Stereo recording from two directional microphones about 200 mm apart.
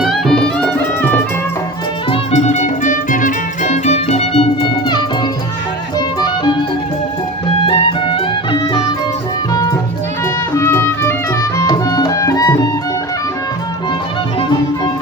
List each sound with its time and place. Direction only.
0.0 s music: centre (ahead or behind)
2.0 s music: 35° left (ahead or behind)
6.1 s music: 20° left (ahead or behind)
7.7 s music: 25° left (ahead or behind)